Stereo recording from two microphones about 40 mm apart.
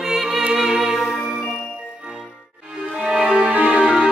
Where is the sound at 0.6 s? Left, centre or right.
Centre.